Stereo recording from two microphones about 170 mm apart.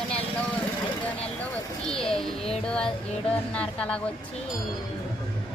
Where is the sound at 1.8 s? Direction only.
5° left (ahead or behind).